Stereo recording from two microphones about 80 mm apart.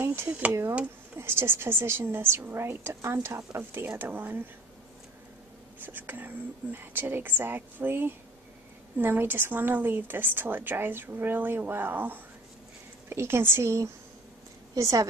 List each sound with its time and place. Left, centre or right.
0.0 s a sound: right
0.5 s a woman's voice: right
5.8 s a woman's voice: right